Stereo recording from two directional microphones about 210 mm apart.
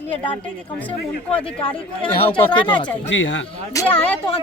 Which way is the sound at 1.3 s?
5° left (ahead or behind).